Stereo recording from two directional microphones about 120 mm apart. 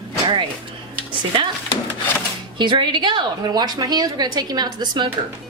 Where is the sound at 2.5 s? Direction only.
40° right (ahead or behind).